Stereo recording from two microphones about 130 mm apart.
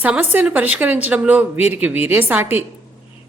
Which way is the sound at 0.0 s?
10° right (ahead or behind).